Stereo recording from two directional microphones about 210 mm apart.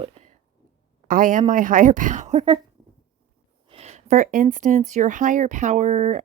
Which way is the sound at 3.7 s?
30° right (ahead or behind).